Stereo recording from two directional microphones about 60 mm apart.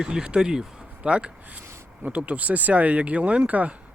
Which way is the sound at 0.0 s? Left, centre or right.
Centre.